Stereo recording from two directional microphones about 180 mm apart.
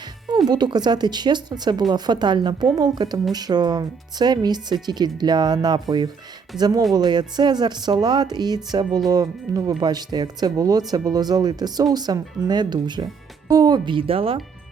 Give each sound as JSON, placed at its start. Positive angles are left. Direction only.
{"t": 0.3, "sound": "speech", "side_deg": -25}